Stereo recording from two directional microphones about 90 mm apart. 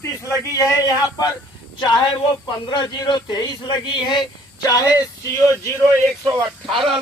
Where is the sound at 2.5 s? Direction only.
55° left (ahead or behind).